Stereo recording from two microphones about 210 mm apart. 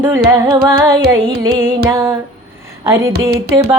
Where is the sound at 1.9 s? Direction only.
10° right (ahead or behind).